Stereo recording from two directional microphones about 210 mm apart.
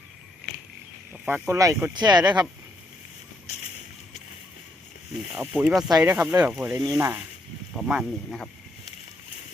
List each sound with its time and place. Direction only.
1.1 s speech: 5° right (ahead or behind)
5.3 s speech: 5° right (ahead or behind)
7.8 s speech: centre (ahead or behind)